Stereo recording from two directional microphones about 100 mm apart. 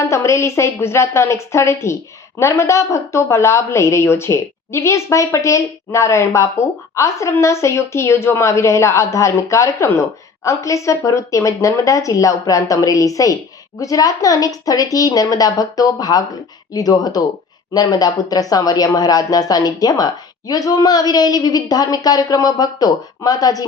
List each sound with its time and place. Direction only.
0.0 s a woman's voice: 30° left (ahead or behind)